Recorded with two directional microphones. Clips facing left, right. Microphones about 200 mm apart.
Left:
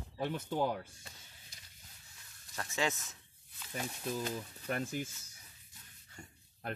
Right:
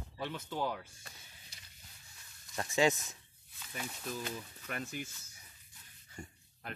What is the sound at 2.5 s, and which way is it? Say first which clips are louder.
Speech: right 6 dB; 15° right (ahead or behind).